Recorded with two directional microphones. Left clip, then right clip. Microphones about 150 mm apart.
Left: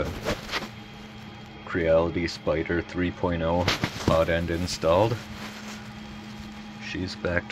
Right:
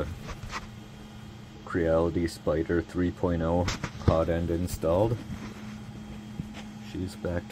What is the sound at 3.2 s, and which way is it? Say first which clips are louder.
Speech: left 4 dB; 35° right (ahead or behind).